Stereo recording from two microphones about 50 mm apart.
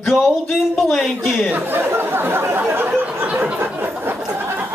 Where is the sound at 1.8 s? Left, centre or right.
Right.